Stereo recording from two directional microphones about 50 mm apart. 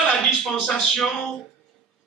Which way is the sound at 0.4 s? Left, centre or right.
Centre.